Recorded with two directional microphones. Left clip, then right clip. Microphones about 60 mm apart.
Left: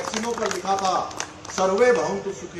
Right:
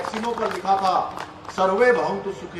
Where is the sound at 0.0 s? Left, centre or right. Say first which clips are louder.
Right 1 dB; centre.